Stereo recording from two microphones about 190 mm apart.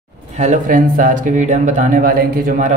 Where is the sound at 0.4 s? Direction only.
45° right (ahead or behind).